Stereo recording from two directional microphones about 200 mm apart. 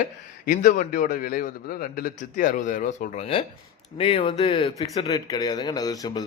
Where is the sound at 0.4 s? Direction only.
40° left (ahead or behind).